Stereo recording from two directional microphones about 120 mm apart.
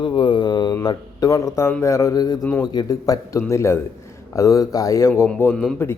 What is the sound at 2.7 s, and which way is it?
Speech, 30° left (ahead or behind).